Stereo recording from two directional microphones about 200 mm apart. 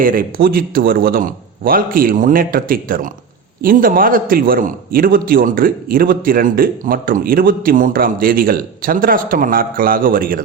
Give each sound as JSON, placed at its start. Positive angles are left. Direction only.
{"t": 0.0, "sound": "a man's voice", "side_deg": -45}